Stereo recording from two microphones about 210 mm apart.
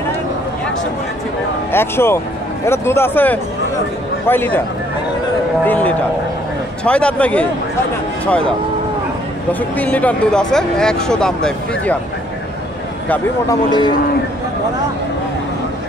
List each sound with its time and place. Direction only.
1.7 s a man's voice: 10° left (ahead or behind)
5.7 s a man's voice: 5° left (ahead or behind)
9.5 s speech: 5° left (ahead or behind)
13.1 s a man's voice: 20° left (ahead or behind)